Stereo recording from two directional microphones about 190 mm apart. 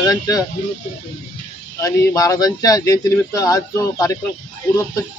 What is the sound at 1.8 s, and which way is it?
Speech, 20° left (ahead or behind).